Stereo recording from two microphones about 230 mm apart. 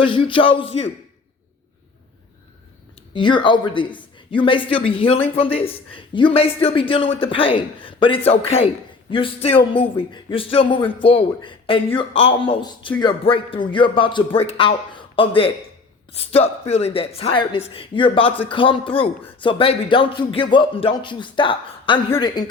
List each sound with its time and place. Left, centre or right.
0.0 s speech: left
3.2 s speech: left